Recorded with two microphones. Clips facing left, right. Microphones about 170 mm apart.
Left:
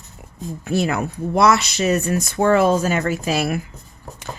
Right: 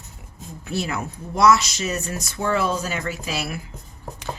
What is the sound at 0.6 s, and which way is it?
Speech, 50° left (ahead or behind).